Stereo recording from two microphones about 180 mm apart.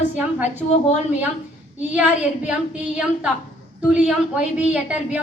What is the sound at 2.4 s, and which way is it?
A woman's voice, 5° right (ahead or behind).